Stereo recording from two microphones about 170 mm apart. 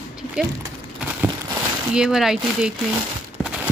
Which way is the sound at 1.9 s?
5° right (ahead or behind).